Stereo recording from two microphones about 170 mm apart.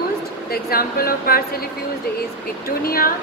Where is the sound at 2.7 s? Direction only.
60° left (ahead or behind).